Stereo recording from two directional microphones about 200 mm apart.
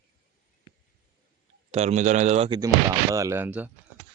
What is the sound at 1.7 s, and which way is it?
Speech, 35° right (ahead or behind).